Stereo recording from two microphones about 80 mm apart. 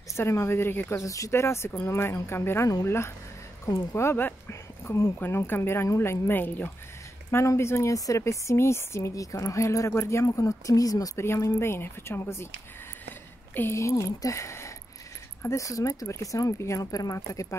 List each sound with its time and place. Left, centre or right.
0.1 s speech: left
7.2 s speech: left
11.1 s speech: left
13.6 s speech: left